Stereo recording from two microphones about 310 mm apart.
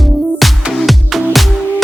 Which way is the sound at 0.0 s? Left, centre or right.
Centre.